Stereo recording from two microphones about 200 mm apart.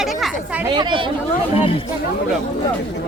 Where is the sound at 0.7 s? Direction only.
25° right (ahead or behind).